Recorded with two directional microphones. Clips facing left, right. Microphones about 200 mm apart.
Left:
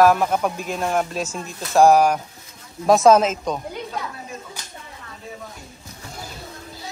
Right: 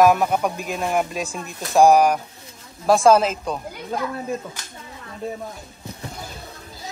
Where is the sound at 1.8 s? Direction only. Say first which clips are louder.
Even; 15° right (ahead or behind).